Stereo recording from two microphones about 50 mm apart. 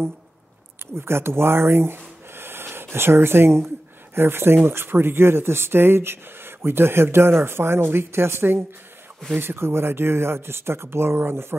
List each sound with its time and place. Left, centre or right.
0.9 s speech: right